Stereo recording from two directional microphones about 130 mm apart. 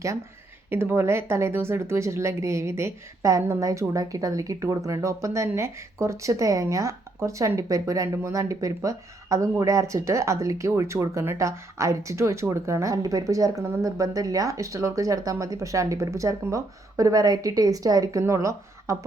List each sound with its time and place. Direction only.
0.7 s speech: 15° right (ahead or behind)